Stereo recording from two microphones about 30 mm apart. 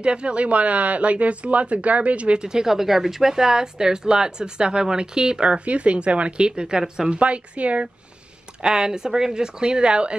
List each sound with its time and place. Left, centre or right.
0.0 s speech: right
2.3 s a woman's voice: right
5.7 s speech: right
7.2 s speech: right
8.6 s a woman's voice: right